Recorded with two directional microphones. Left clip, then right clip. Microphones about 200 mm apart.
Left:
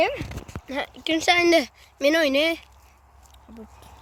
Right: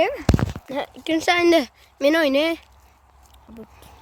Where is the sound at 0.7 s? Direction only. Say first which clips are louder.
Even; 25° right (ahead or behind).